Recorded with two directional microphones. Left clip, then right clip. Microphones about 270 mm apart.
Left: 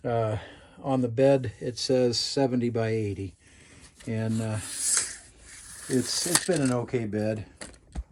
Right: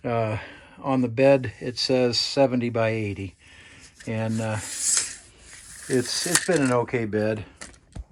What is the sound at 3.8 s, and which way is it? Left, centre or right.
Rub, centre.